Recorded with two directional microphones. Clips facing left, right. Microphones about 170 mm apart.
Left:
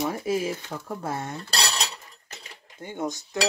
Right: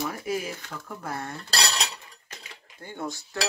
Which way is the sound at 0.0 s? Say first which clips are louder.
Left 4 dB; 25° left (ahead or behind).